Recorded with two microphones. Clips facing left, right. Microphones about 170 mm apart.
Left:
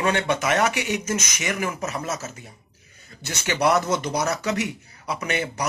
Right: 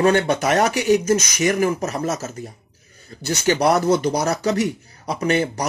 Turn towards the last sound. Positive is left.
turn(degrees=-35)  # may be behind; listen again after turning